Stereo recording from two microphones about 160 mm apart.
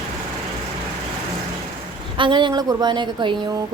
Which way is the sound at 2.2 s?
30° right (ahead or behind).